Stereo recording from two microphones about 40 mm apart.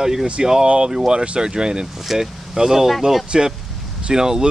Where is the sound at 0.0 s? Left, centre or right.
Centre.